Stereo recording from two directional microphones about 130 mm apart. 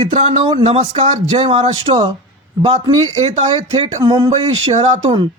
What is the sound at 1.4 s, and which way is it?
Speech, 40° right (ahead or behind).